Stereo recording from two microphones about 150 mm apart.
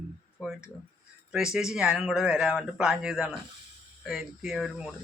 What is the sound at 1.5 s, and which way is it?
A man's voice, 5° right (ahead or behind).